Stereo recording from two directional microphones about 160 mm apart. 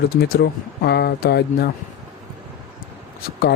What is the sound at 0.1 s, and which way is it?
Speech, 80° left.